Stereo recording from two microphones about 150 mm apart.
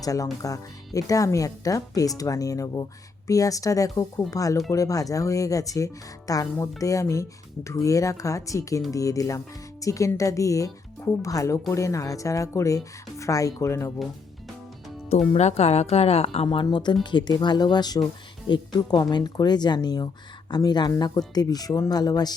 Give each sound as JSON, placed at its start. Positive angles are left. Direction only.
{"t": 0.0, "sound": "speech", "side_deg": 25}
{"t": 15.3, "sound": "speech", "side_deg": 45}